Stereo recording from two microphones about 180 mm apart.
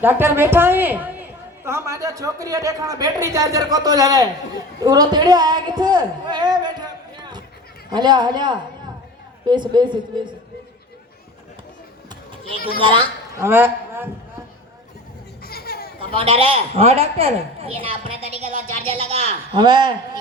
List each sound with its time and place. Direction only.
0.0 s a woman's voice: 10° right (ahead or behind)
12.5 s a man's voice: 55° left (ahead or behind)
12.8 s a man's voice: 25° right (ahead or behind)
13.3 s a man's voice: 15° right (ahead or behind)
15.4 s a sound: 60° left (ahead or behind)
16.1 s a woman's voice: 30° right (ahead or behind)